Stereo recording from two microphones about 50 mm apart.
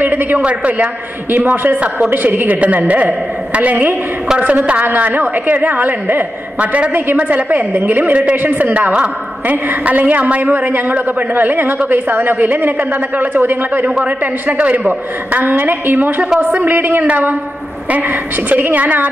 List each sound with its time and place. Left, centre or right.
0.0 s a sound: right
0.5 s a woman's voice: right
13.8 s a woman's voice: right
18.5 s a woman's voice: right